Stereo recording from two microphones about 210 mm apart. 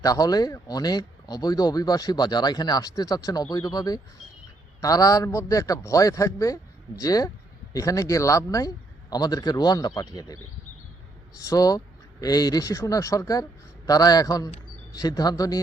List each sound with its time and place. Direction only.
0.0 s speech: 15° left (ahead or behind)
11.4 s speech: 15° left (ahead or behind)